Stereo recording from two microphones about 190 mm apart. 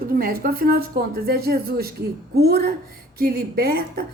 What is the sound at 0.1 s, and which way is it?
A woman's voice, 50° right (ahead or behind).